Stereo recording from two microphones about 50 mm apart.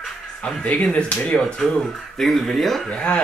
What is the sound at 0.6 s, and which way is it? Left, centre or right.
Speech, left.